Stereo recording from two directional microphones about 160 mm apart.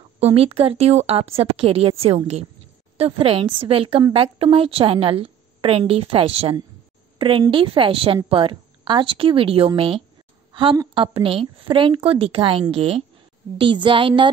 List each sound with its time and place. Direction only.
0.2 s a woman's voice: 35° right (ahead or behind)